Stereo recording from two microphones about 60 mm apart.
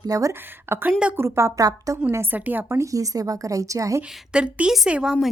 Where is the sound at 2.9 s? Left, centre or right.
Right.